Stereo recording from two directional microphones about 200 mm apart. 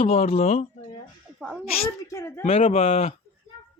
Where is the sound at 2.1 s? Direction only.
15° left (ahead or behind).